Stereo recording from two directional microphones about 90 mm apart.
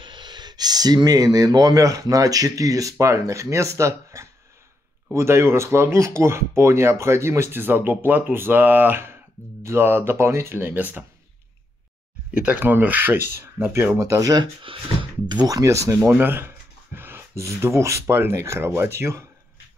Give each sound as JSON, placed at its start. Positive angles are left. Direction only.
{"t": 0.0, "sound": "speech", "side_deg": -55}
{"t": 12.4, "sound": "speech", "side_deg": -15}
{"t": 14.6, "sound": "speech", "side_deg": -75}
{"t": 16.2, "sound": "speech", "side_deg": -25}